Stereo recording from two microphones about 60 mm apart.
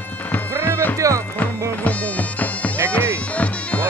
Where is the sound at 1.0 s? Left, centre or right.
Right.